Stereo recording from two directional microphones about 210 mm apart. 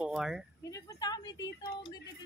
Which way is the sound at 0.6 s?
15° left (ahead or behind).